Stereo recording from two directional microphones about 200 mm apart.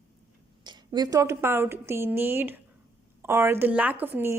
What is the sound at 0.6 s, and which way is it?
A woman's voice, 20° right (ahead or behind).